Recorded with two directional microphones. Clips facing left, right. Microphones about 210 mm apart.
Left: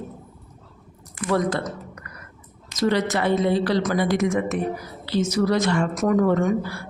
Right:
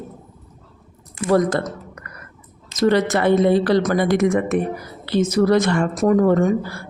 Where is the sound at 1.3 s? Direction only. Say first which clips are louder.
Right 5 dB; 45° right (ahead or behind).